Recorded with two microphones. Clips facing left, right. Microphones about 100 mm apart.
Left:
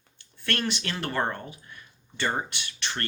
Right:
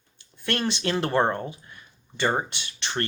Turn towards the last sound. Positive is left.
turn(degrees=-25)  # may be behind; listen again after turning